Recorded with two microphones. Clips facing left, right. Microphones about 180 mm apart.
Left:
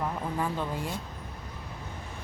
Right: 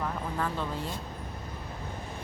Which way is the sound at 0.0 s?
15° left (ahead or behind).